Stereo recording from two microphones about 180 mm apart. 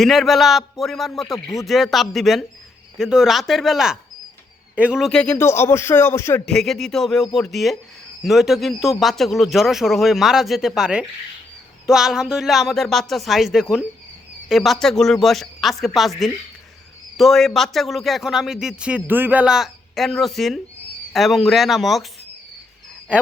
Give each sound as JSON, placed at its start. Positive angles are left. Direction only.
{"t": 0.0, "sound": "a man's voice", "side_deg": 0}
{"t": 6.4, "sound": "a man's voice", "side_deg": 0}